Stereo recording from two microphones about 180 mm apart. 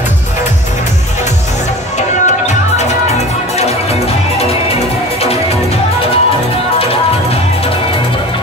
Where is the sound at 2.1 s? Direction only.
40° left (ahead or behind).